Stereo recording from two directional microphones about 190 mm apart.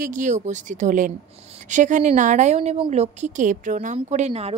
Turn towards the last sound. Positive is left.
turn(degrees=-35)  # may be behind; listen again after turning